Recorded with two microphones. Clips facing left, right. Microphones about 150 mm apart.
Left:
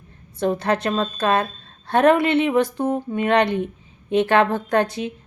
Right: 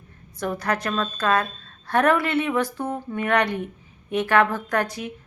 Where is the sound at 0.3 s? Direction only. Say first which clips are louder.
Left 5 dB; 25° left (ahead or behind).